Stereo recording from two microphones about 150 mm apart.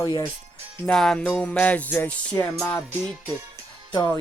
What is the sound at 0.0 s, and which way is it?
Music, 25° left (ahead or behind).